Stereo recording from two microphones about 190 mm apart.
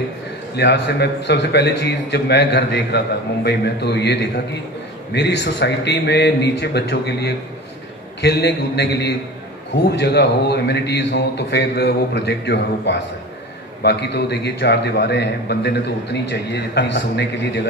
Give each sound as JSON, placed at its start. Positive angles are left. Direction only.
{"t": 0.6, "sound": "a man's voice", "side_deg": 60}